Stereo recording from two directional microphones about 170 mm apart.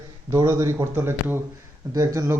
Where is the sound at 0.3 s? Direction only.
20° right (ahead or behind).